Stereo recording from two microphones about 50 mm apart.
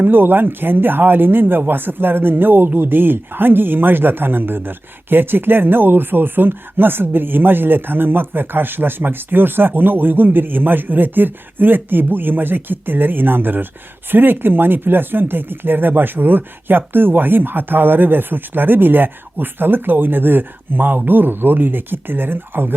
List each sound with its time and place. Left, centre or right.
0.0 s speech: right